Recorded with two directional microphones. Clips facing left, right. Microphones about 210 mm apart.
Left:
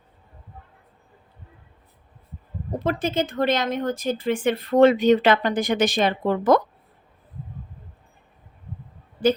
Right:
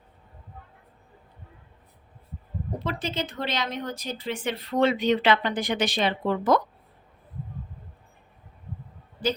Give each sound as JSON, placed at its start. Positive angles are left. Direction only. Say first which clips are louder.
{"t": 2.7, "sound": "speech", "louder": "left 7 dB", "side_deg": 50}